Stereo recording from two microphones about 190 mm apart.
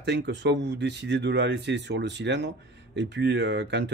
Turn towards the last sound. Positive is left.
turn(degrees=-65)  # may be behind; listen again after turning